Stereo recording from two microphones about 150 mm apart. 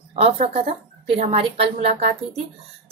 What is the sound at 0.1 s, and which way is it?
A woman's voice, 45° right (ahead or behind).